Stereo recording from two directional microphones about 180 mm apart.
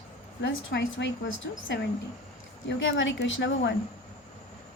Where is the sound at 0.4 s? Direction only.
80° left.